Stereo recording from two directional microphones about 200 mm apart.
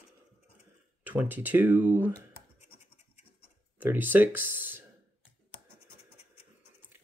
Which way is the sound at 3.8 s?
10° right (ahead or behind).